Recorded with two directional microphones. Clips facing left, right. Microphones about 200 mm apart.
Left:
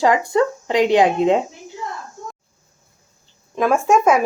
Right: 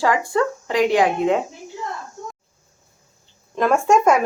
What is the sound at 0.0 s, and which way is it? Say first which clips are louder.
Speech: left 3 dB; 20° left (ahead or behind).